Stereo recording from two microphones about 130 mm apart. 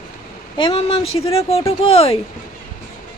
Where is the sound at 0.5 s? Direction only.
45° left (ahead or behind).